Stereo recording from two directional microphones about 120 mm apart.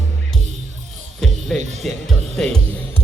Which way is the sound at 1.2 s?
5° left (ahead or behind).